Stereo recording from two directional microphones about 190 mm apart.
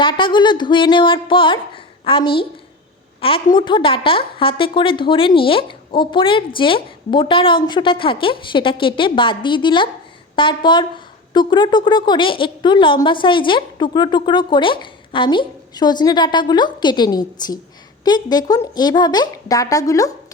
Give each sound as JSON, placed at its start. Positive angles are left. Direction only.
{"t": 0.0, "sound": "a woman's voice", "side_deg": 25}